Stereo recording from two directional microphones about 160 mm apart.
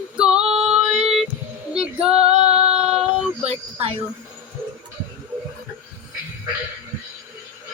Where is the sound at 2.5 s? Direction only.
40° right (ahead or behind).